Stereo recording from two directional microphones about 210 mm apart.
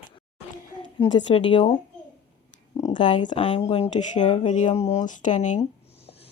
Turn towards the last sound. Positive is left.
turn(degrees=30)  # may be behind; listen again after turning